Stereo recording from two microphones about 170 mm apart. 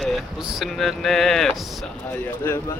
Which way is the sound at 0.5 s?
Centre (ahead or behind).